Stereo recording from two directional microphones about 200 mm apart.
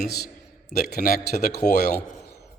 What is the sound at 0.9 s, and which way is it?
Speech, 50° left (ahead or behind).